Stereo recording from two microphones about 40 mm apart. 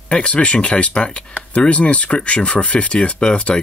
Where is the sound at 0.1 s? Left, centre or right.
Left.